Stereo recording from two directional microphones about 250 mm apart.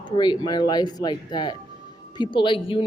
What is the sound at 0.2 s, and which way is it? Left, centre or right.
A woman's voice, centre.